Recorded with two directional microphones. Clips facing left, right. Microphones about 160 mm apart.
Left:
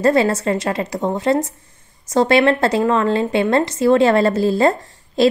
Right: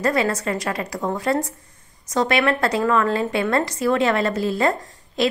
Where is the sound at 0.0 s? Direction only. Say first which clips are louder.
Left 6 dB; 30° left (ahead or behind).